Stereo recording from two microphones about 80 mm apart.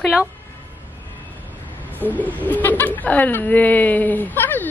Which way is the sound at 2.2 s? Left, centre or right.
Centre.